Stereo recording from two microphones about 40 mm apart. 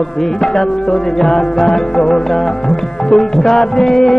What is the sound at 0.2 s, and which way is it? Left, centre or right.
Music, centre.